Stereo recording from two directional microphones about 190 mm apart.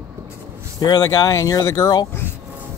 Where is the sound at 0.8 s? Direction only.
20° left (ahead or behind).